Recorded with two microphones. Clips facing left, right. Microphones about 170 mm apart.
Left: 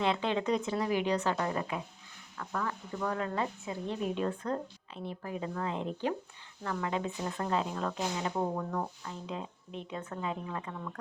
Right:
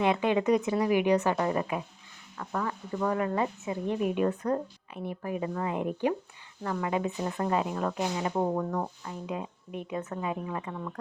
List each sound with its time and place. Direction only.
0.0 s speech: 15° right (ahead or behind)